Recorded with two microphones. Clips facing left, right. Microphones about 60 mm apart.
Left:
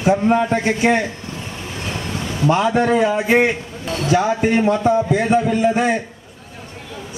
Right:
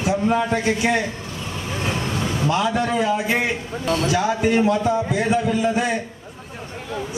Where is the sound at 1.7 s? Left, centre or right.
Right.